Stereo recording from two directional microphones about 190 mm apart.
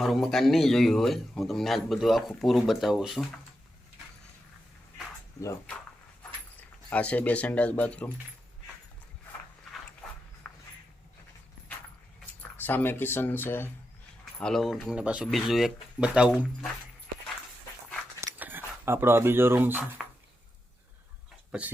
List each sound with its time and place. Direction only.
0.0 s speech: centre (ahead or behind)
5.4 s speech: 15° left (ahead or behind)
10.4 s a sound: 5° left (ahead or behind)
12.2 s speech: 10° left (ahead or behind)
14.4 s speech: centre (ahead or behind)
18.2 s a sound: 10° right (ahead or behind)
20.0 s chopping: 5° right (ahead or behind)